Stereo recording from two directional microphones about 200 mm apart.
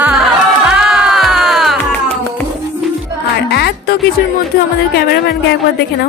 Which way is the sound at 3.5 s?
55° left (ahead or behind).